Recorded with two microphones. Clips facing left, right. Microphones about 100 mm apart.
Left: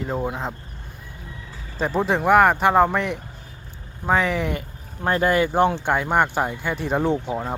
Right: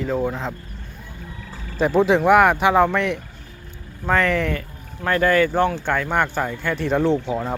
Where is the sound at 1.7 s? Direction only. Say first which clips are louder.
Right 5 dB; centre (ahead or behind).